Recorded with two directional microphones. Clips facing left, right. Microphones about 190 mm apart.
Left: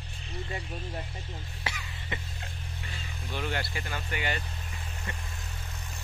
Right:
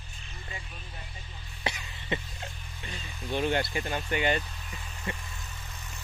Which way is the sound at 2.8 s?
20° right (ahead or behind).